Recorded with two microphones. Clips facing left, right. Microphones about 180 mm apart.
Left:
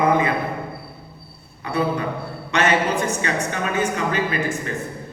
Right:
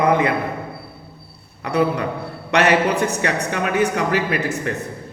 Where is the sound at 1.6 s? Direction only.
70° right (ahead or behind).